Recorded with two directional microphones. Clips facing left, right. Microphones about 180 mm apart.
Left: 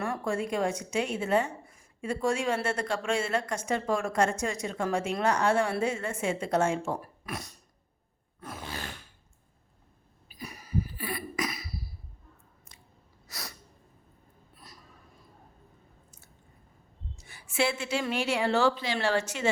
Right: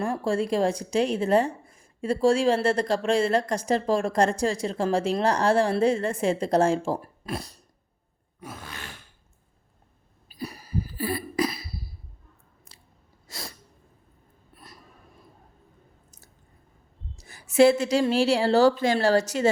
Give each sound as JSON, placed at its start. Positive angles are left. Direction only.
{"t": 0.0, "sound": "speech", "side_deg": -30}
{"t": 8.4, "sound": "a sound", "side_deg": -15}
{"t": 10.2, "sound": "cough", "side_deg": -35}
{"t": 13.2, "sound": "sneeze", "side_deg": -25}
{"t": 17.2, "sound": "speech", "side_deg": -40}